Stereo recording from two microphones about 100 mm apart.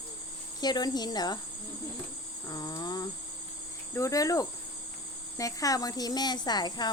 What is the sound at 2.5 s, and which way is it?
Speech, 40° left (ahead or behind).